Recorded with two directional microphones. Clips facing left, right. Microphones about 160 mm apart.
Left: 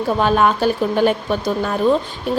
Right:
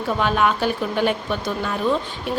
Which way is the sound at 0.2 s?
40° left (ahead or behind).